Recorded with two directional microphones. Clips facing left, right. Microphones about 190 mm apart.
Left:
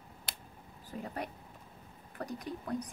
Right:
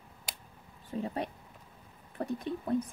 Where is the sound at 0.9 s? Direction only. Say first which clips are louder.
Right 5 dB; 25° right (ahead or behind).